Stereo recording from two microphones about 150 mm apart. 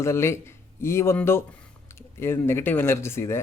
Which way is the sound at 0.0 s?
20° left (ahead or behind).